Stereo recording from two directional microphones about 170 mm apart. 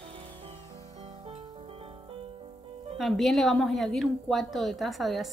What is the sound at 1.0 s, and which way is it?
Music, 35° right (ahead or behind).